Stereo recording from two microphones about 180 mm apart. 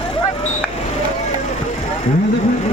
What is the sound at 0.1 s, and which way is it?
Vehicle, 30° left (ahead or behind).